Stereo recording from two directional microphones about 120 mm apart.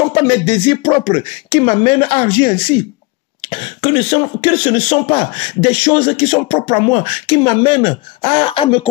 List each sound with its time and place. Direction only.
0.2 s speech: 50° left (ahead or behind)